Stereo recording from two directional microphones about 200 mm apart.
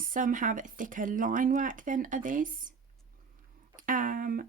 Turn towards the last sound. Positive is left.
turn(degrees=-45)  # may be behind; listen again after turning